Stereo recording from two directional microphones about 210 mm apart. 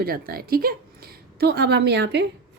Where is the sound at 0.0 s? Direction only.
45° right (ahead or behind).